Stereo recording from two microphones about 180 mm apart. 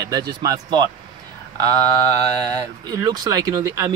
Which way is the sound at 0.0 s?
20° right (ahead or behind).